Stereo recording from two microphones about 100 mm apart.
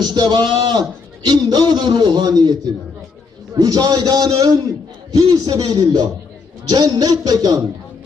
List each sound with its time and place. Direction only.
0.0 s a man's voice: 45° right (ahead or behind)